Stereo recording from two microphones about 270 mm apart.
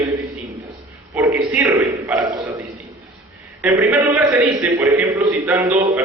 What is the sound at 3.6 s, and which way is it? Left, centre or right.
A man's voice, centre.